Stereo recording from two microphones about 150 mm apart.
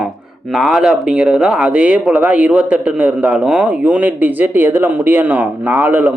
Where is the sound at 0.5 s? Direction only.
Centre (ahead or behind).